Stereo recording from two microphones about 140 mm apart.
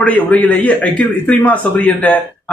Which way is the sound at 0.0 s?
10° left (ahead or behind).